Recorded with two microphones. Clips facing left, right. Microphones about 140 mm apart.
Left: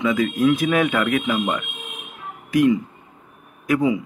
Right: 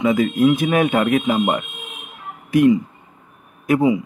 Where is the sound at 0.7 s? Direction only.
20° right (ahead or behind).